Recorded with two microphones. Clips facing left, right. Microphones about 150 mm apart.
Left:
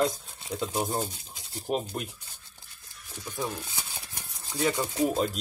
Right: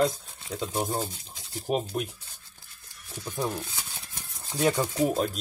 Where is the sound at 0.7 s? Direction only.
15° left (ahead or behind).